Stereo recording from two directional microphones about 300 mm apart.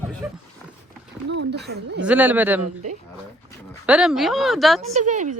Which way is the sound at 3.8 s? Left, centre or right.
Centre.